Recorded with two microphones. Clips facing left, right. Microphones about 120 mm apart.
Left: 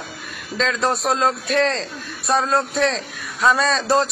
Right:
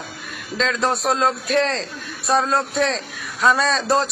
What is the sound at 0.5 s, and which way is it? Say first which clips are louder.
A man's voice: even; centre (ahead or behind).